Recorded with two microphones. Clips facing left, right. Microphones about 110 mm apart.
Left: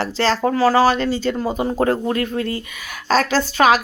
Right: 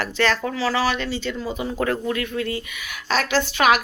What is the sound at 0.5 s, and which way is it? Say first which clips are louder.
A woman's voice: left 8 dB; 45° left (ahead or behind).